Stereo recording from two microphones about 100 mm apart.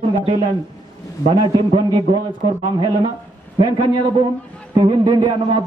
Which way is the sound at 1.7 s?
55° right (ahead or behind).